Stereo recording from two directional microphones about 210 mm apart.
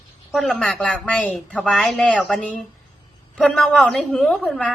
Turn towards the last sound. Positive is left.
turn(degrees=5)  # may be behind; listen again after turning